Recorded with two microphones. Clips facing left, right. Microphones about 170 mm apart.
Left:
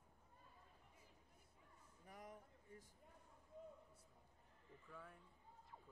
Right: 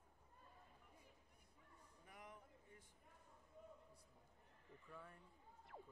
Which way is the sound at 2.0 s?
45° left (ahead or behind).